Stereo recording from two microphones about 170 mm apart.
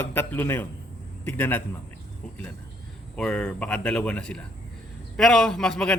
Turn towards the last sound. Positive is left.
turn(degrees=5)  # may be behind; listen again after turning